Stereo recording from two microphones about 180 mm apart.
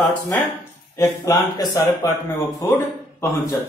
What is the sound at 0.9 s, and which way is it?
Speech, 20° left (ahead or behind).